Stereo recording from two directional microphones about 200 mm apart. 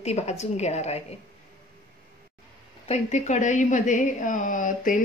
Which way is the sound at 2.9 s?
35° left (ahead or behind).